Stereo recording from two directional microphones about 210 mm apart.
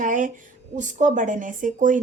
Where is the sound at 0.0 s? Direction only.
40° right (ahead or behind).